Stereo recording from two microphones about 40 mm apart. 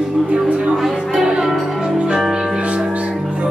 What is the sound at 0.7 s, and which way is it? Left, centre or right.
Music, centre.